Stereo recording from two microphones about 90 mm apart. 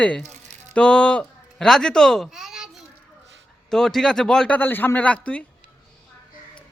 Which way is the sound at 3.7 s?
5° left (ahead or behind).